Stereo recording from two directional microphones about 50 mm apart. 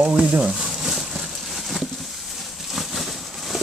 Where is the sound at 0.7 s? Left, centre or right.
Centre.